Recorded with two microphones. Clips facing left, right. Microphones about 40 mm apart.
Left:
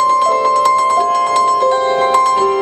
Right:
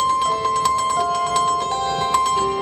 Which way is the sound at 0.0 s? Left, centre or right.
Left.